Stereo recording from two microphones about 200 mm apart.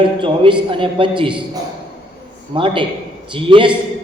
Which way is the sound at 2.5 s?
25° right (ahead or behind).